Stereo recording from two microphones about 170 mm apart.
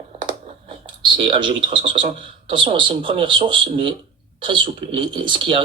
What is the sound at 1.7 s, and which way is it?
Speech, 30° right (ahead or behind).